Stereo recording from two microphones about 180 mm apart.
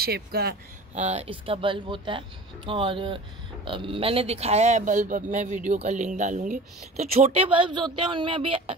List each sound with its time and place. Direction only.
0.0 s speech: 60° right (ahead or behind)
0.9 s speech: 40° right (ahead or behind)